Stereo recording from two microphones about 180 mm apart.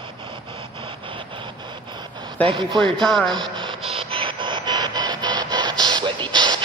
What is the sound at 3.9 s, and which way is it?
Printer, 30° right (ahead or behind).